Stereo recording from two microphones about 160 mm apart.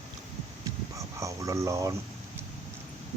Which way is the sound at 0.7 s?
20° right (ahead or behind).